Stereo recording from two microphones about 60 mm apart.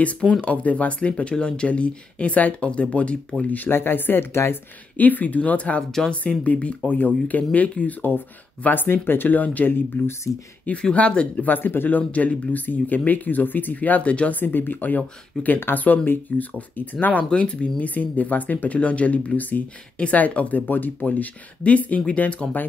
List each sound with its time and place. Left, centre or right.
0.4 s speech: left
10.6 s speech: left
11.4 s speech: left
12.0 s speech: left